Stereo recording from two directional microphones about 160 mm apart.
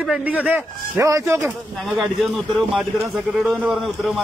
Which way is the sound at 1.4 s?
Centre (ahead or behind).